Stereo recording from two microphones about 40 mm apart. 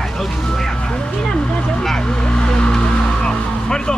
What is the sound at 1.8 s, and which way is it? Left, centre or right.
Vehicle, centre.